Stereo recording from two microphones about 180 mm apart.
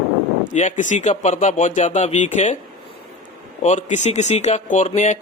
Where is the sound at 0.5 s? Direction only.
45° left (ahead or behind).